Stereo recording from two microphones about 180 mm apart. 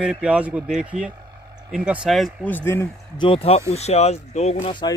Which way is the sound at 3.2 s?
30° left (ahead or behind).